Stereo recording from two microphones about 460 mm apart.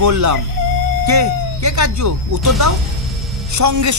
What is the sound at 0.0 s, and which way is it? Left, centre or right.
Speech, right.